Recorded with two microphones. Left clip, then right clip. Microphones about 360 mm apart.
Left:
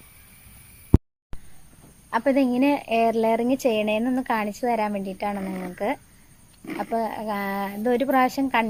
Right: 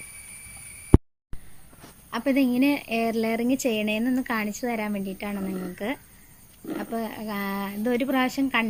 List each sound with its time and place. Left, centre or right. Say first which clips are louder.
2.0 s a woman's voice: left 3 dB; left